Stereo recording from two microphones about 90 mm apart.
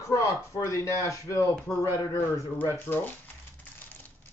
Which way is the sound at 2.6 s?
20° left (ahead or behind).